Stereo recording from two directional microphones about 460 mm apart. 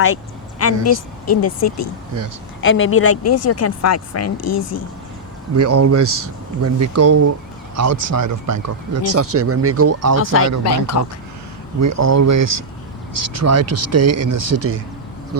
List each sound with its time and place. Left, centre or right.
0.6 s speech: left
5.5 s speech: right
10.6 s speech: left
11.8 s speech: right